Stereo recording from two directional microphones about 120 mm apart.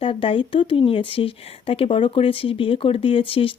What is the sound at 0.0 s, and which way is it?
Speech, 50° left (ahead or behind).